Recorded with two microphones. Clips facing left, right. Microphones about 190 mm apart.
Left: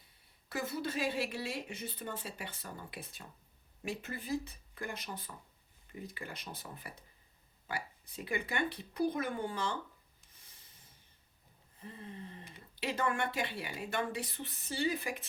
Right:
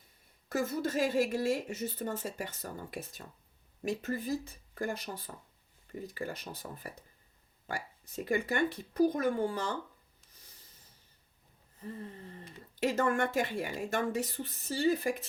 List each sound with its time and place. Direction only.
0.4 s a woman's voice: 45° right (ahead or behind)
11.8 s a woman's voice: 40° right (ahead or behind)